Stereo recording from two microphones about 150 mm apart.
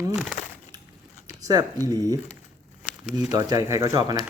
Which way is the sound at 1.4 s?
25° right (ahead or behind).